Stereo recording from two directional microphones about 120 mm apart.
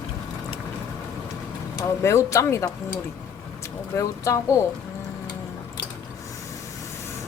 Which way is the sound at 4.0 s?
25° left (ahead or behind).